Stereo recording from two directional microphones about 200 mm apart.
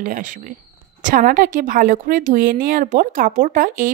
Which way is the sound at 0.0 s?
40° right (ahead or behind).